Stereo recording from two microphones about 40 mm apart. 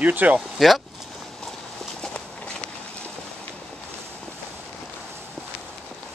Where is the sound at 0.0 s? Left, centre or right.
Right.